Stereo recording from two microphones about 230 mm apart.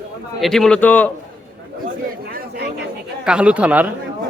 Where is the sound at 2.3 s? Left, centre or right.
Right.